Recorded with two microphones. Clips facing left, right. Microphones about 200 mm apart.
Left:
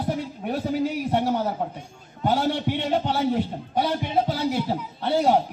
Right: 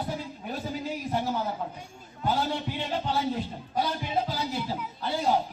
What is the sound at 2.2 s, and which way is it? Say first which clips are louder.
A man's voice: left 5 dB; 70° left (ahead or behind).